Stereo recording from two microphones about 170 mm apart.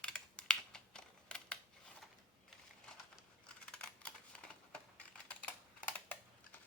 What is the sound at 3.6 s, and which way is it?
Typing, 5° left (ahead or behind).